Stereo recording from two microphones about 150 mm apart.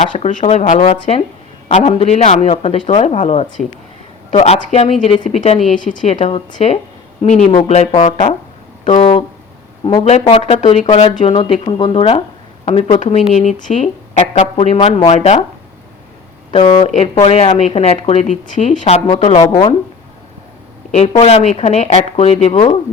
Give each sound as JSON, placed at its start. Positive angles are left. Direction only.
{"t": 0.0, "sound": "speech", "side_deg": 50}
{"t": 9.8, "sound": "speech", "side_deg": 40}
{"t": 11.3, "sound": "speech", "side_deg": 40}
{"t": 16.8, "sound": "speech", "side_deg": 50}
{"t": 20.9, "sound": "speech", "side_deg": 45}